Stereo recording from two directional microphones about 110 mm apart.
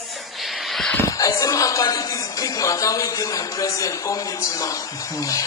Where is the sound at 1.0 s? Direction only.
30° left (ahead or behind).